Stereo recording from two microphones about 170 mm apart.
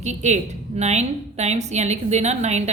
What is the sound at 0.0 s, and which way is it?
A woman's voice, 40° right (ahead or behind).